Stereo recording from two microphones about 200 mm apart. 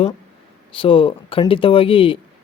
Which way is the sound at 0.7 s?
25° left (ahead or behind).